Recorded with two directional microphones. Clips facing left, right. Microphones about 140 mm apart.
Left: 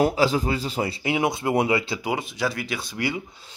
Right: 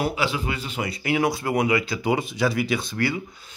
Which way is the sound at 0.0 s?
40° left (ahead or behind).